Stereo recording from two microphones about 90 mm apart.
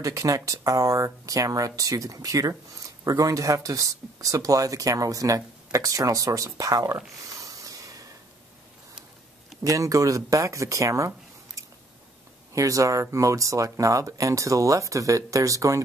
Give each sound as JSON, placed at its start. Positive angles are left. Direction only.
{"t": 0.0, "sound": "speech", "side_deg": -40}
{"t": 7.3, "sound": "a sound", "side_deg": -40}
{"t": 9.6, "sound": "speech", "side_deg": -40}